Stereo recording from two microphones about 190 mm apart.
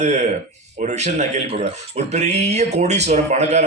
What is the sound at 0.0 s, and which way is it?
Speech, 35° right (ahead or behind).